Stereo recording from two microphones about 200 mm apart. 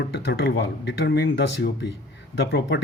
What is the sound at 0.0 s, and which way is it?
Speech, 55° left (ahead or behind).